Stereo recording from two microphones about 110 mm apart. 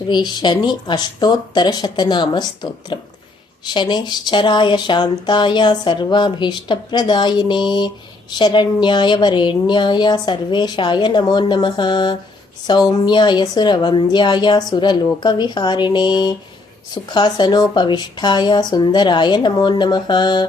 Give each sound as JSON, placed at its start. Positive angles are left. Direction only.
{"t": 0.1, "sound": "speech", "side_deg": 40}